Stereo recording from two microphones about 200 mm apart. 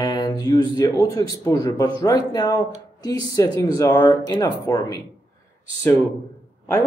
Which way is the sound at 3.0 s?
15° left (ahead or behind).